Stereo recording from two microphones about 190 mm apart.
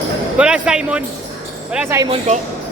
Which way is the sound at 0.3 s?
5° right (ahead or behind).